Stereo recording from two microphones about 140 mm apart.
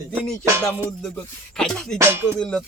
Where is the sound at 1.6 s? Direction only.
5° left (ahead or behind).